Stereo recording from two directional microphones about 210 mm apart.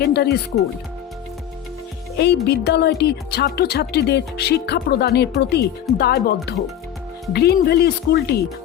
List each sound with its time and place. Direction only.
0.0 s speech: 50° left (ahead or behind)
2.1 s speech: 50° left (ahead or behind)